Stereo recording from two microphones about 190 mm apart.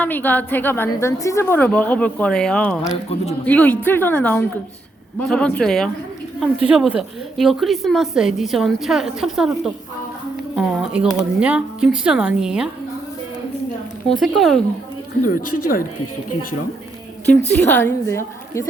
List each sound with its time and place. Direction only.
0.0 s a woman's voice: 10° left (ahead or behind)
14.1 s a woman's voice: centre (ahead or behind)
15.2 s speech: 45° left (ahead or behind)
17.6 s a woman's voice: 10° left (ahead or behind)